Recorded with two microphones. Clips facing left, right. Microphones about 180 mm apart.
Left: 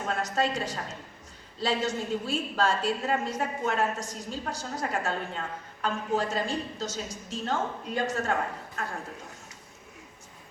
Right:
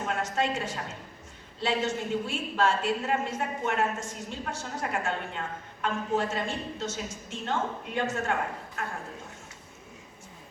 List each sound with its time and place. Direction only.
0.1 s a woman's voice: 35° left (ahead or behind)